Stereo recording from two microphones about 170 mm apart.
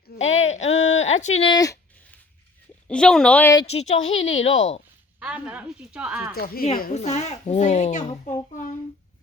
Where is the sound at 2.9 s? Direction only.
5° left (ahead or behind).